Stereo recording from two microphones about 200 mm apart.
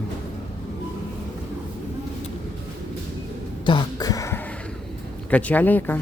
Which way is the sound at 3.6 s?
20° left (ahead or behind).